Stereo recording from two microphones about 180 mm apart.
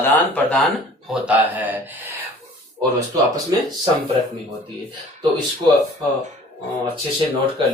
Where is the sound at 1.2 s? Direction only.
10° right (ahead or behind).